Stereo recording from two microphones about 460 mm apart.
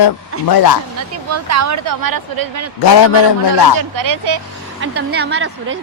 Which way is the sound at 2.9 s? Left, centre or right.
Left.